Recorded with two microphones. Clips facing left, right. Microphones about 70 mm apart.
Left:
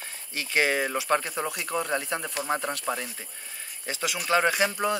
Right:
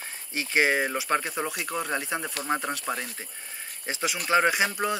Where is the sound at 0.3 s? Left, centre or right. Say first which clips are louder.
Right 1 dB; centre.